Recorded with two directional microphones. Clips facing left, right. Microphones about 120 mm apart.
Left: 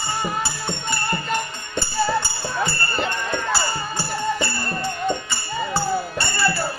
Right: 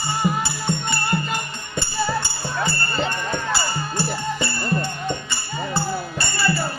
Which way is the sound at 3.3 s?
Centre (ahead or behind).